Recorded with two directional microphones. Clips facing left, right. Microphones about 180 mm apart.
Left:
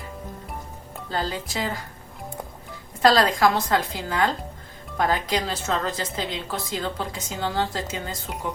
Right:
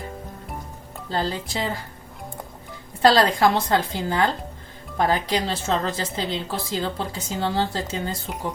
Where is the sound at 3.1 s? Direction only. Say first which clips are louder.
Right 1 dB; 30° right (ahead or behind).